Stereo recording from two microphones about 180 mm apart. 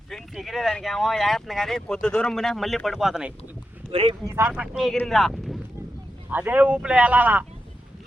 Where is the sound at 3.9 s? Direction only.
30° right (ahead or behind).